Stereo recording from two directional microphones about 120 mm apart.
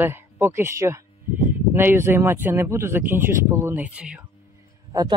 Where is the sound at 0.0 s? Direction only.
20° right (ahead or behind).